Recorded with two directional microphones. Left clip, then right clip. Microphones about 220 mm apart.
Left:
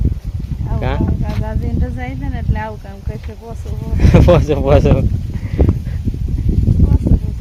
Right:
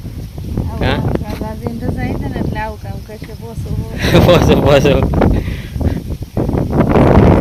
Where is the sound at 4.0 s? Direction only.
15° right (ahead or behind).